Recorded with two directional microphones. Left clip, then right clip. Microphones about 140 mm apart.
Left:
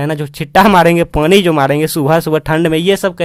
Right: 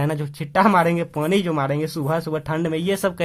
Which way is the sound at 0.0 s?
40° left (ahead or behind).